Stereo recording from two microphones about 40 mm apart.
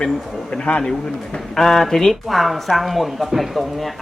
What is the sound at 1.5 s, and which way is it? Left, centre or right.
Speech, centre.